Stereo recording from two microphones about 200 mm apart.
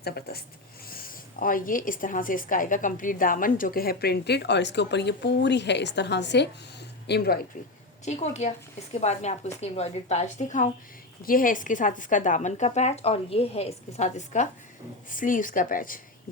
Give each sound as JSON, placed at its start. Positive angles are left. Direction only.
{"t": 0.0, "sound": "speech", "side_deg": 50}
{"t": 8.0, "sound": "a woman's voice", "side_deg": 35}